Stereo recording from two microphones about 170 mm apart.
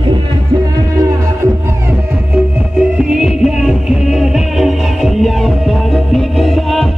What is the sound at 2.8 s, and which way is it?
Music, 5° right (ahead or behind).